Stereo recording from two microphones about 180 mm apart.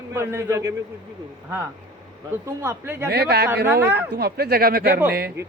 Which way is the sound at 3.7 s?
10° right (ahead or behind).